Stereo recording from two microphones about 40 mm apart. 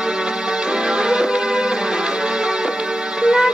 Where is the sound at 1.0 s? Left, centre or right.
Centre.